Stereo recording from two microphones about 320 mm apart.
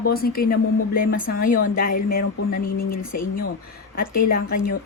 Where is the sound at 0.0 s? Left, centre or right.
Left.